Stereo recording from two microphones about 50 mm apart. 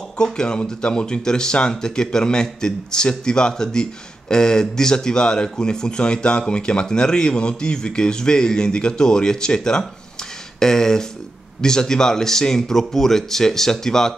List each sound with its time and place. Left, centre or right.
0.2 s speech: centre